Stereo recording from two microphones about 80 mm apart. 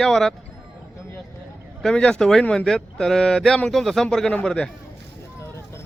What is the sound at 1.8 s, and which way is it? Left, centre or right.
Speech, centre.